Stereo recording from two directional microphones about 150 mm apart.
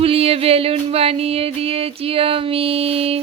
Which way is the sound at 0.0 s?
40° right (ahead or behind).